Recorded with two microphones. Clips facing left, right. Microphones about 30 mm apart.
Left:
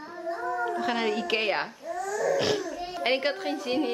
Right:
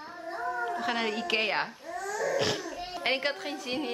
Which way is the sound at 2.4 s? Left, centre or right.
Centre.